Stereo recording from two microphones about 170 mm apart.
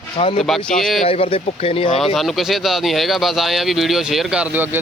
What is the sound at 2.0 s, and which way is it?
Speech, centre (ahead or behind).